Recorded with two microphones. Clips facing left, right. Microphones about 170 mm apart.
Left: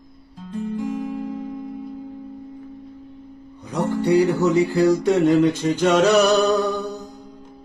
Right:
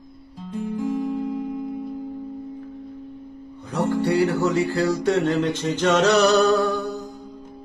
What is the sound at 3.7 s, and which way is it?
Music, 15° left (ahead or behind).